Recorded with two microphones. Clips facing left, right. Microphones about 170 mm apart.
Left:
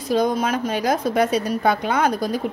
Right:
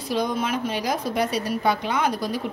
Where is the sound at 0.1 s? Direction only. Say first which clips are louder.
Left 5 dB; 45° left (ahead or behind).